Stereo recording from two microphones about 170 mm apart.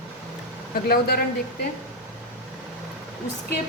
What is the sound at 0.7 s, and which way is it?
Speech, 65° left (ahead or behind).